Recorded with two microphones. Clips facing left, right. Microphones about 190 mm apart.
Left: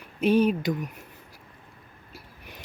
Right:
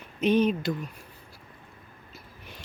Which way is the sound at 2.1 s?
15° left (ahead or behind).